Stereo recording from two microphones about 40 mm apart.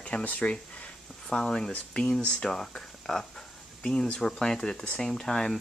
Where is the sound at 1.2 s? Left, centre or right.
Centre.